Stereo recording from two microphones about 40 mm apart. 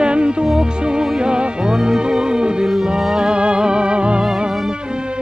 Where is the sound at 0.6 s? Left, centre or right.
Centre.